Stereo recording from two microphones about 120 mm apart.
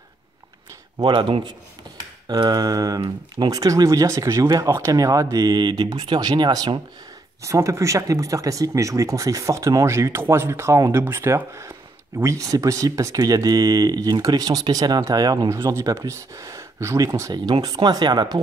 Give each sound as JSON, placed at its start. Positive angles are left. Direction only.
{"t": 0.9, "sound": "speech", "side_deg": -40}
{"t": 7.4, "sound": "speech", "side_deg": -25}